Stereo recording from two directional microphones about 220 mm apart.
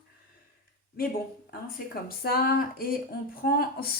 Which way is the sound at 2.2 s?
45° left (ahead or behind).